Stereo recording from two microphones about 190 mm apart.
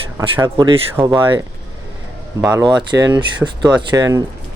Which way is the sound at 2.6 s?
25° right (ahead or behind).